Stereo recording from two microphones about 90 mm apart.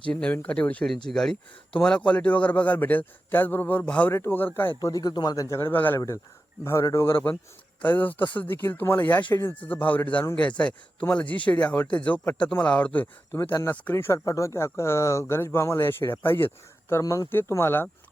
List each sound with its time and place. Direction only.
0.0 s a man's voice: 15° left (ahead or behind)
4.8 s speech: 45° left (ahead or behind)
5.5 s speech: 25° left (ahead or behind)
6.7 s speech: 35° left (ahead or behind)
9.6 s a man's voice: 20° left (ahead or behind)
13.3 s speech: 30° left (ahead or behind)
16.9 s speech: 35° left (ahead or behind)
17.3 s speech: 25° left (ahead or behind)